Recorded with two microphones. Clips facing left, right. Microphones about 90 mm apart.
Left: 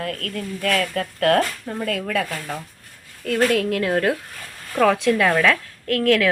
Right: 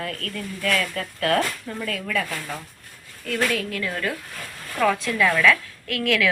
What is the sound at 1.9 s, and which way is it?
Speech, 55° left (ahead or behind).